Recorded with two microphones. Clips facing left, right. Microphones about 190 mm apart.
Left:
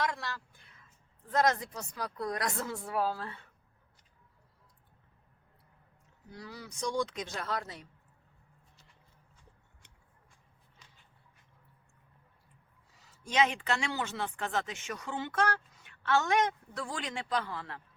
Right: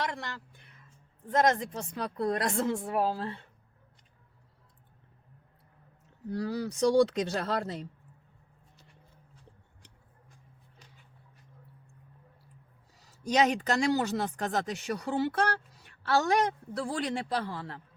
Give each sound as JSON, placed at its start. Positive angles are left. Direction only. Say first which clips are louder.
{"t": 1.3, "sound": "speech", "louder": "right 3 dB", "side_deg": -20}
{"t": 6.2, "sound": "speech", "louder": "right 14 dB", "side_deg": -35}
{"t": 12.9, "sound": "speech", "louder": "right 6 dB", "side_deg": -40}